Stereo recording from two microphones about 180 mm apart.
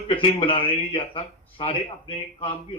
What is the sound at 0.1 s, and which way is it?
Speech, 30° left (ahead or behind).